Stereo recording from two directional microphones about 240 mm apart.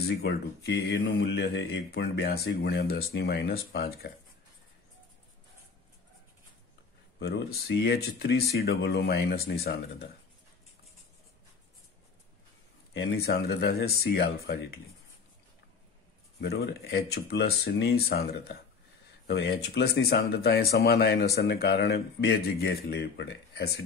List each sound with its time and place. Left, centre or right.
0.2 s speech: left
7.2 s speech: left
12.9 s speech: left
16.3 s speech: left